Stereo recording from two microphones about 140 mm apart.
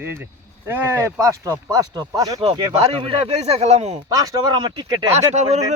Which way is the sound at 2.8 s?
40° right (ahead or behind).